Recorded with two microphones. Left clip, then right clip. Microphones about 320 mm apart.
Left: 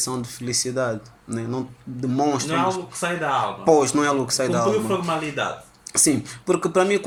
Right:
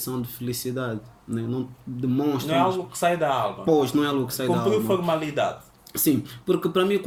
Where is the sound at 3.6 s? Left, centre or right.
Centre.